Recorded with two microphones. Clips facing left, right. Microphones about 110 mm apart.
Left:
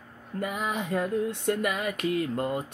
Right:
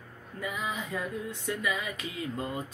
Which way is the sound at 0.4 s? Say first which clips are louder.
Left 4 dB; 65° left (ahead or behind).